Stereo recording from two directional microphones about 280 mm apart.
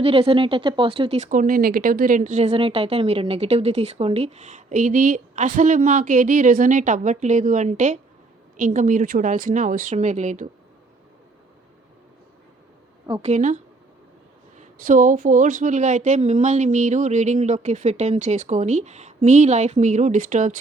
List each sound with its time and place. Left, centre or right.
0.0 s speech: centre
13.2 s speech: right
14.6 s speech: right